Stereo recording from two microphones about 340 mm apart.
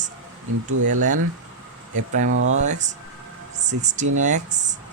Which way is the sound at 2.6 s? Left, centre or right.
Right.